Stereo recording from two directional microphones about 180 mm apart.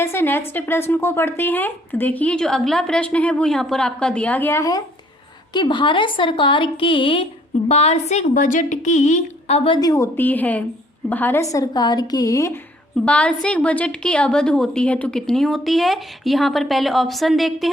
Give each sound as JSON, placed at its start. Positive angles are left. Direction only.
{"t": 0.0, "sound": "a woman's voice", "side_deg": 15}
{"t": 13.1, "sound": "a woman's voice", "side_deg": 5}